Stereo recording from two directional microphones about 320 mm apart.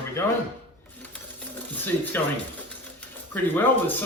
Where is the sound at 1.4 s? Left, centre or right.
Centre.